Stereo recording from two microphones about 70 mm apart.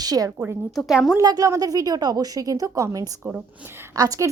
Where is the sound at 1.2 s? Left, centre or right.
Right.